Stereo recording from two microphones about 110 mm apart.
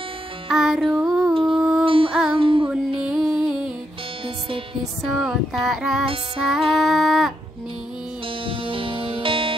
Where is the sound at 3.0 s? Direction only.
10° right (ahead or behind).